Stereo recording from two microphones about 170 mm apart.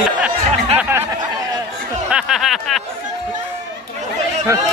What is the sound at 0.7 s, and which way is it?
Music, 10° right (ahead or behind).